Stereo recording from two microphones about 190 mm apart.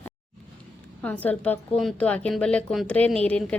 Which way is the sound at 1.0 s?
10° left (ahead or behind).